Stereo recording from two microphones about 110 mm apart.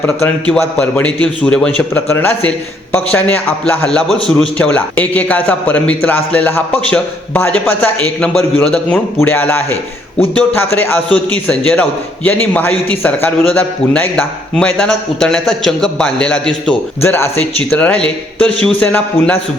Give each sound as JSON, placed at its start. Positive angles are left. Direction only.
{"t": 0.0, "sound": "a man's voice", "side_deg": 20}
{"t": 17.0, "sound": "a man's voice", "side_deg": 25}